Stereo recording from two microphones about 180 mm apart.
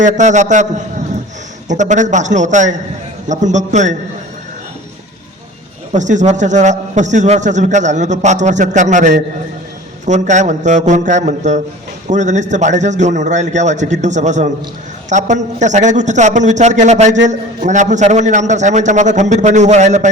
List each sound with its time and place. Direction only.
0.0 s a man's voice: 40° right (ahead or behind)
5.9 s a man's voice: 40° right (ahead or behind)